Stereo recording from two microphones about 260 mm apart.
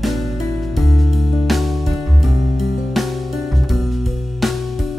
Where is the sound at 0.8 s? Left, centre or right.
Centre.